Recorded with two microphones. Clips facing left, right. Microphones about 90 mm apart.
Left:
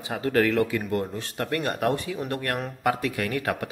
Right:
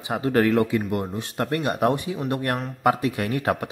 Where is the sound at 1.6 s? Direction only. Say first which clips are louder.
Right 4 dB; 20° right (ahead or behind).